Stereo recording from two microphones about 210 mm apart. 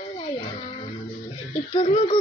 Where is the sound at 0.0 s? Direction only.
30° left (ahead or behind).